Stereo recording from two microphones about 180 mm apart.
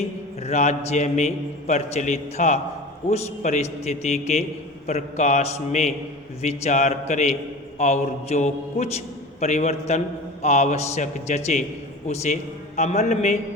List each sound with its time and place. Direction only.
0.4 s a man's voice: 40° left (ahead or behind)